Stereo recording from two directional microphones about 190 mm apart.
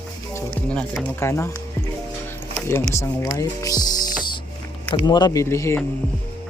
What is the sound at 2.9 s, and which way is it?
Speech, 15° left (ahead or behind).